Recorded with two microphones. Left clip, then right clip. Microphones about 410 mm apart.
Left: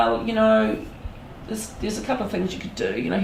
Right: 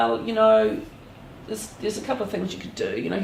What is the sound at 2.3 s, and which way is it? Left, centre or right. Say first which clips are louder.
Speech: left 2 dB; right.